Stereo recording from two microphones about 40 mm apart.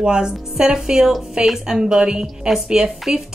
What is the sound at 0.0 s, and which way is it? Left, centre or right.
A woman's voice, right.